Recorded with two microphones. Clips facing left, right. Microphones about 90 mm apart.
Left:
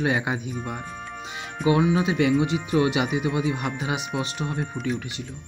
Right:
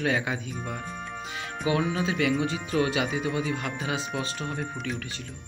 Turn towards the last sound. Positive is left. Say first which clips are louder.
# left 4 dB
turn(degrees=5)  # may be behind; listen again after turning